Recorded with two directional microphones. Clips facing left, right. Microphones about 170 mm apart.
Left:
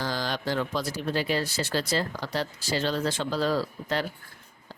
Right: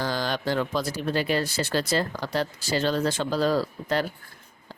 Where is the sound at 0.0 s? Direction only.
55° right (ahead or behind).